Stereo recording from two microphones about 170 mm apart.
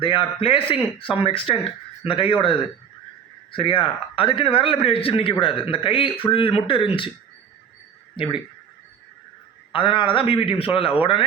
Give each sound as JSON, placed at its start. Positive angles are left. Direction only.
{"t": 0.0, "sound": "speech", "side_deg": 30}
{"t": 3.5, "sound": "speech", "side_deg": 30}
{"t": 8.1, "sound": "speech", "side_deg": 30}
{"t": 9.7, "sound": "speech", "side_deg": 30}